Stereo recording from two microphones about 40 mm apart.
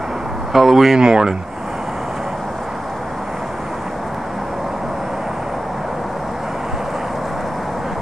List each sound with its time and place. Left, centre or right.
0.5 s speech: centre
0.9 s speech: centre